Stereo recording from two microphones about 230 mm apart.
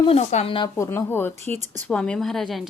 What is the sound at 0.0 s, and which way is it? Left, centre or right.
Speech, left.